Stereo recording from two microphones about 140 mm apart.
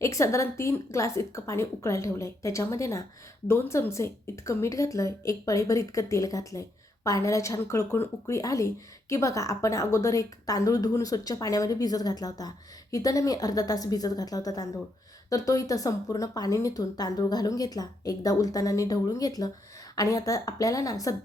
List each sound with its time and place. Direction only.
0.0 s a woman's voice: 20° left (ahead or behind)